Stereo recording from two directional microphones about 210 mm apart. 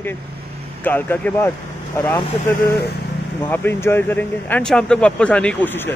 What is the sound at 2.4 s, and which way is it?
Speech, 45° left (ahead or behind).